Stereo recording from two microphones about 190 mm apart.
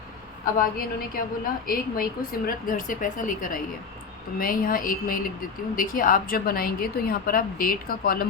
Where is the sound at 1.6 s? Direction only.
50° left (ahead or behind).